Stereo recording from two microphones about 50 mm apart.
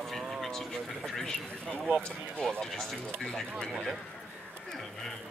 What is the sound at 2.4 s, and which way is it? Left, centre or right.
A man's voice, centre.